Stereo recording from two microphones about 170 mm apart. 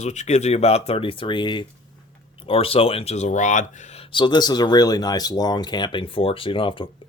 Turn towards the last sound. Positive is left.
turn(degrees=30)  # may be behind; listen again after turning